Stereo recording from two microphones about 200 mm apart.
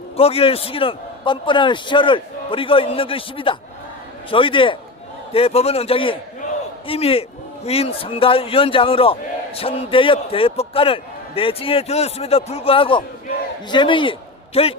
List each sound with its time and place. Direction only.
0.2 s a man's voice: 30° left (ahead or behind)